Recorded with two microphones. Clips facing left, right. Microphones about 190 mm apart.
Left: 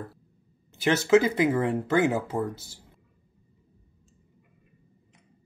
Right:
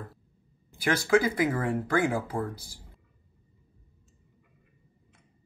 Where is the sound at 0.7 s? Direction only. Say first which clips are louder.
Left 4 dB; 20° left (ahead or behind).